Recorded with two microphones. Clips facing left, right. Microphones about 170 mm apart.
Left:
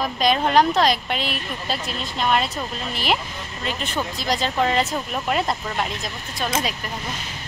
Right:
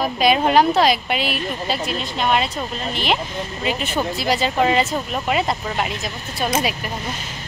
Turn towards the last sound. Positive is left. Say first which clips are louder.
# right 3 dB
turn(degrees=-10)  # may be behind; listen again after turning